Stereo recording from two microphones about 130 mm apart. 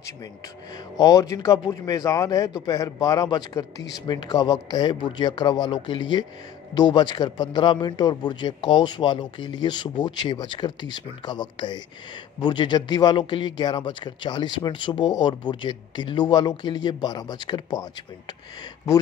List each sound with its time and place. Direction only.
0.9 s speech: 25° left (ahead or behind)